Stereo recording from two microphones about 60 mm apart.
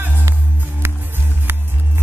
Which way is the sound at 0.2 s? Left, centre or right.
Right.